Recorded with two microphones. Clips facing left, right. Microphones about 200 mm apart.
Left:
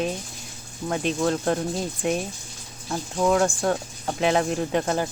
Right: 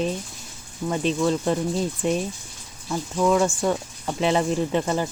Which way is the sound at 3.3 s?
5° right (ahead or behind).